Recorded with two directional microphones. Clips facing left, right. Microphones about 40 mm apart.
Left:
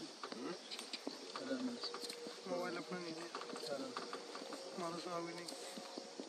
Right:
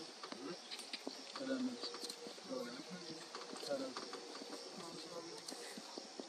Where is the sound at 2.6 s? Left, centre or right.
Left.